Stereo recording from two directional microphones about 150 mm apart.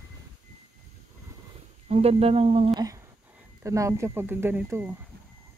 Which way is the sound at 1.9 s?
45° right (ahead or behind).